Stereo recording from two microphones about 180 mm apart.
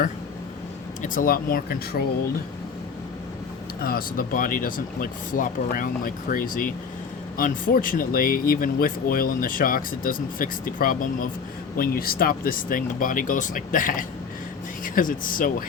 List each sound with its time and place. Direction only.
1.0 s speech: 50° left (ahead or behind)
3.8 s speech: 55° left (ahead or behind)